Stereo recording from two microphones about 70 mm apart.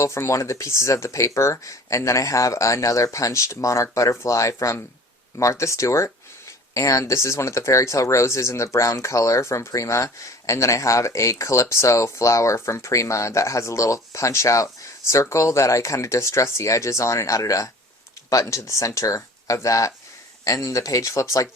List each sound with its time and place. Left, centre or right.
0.0 s speech: left